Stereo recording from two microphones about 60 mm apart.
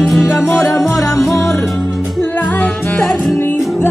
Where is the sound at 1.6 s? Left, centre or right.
Centre.